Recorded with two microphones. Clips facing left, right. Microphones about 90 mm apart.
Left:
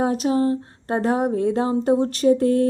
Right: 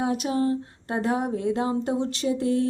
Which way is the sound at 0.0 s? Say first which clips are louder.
Left 5 dB; 35° left (ahead or behind).